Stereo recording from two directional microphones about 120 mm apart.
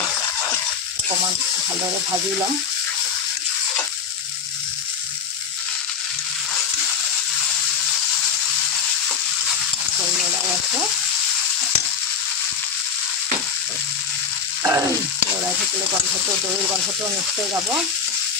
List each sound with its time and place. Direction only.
14.6 s frying: 20° right (ahead or behind)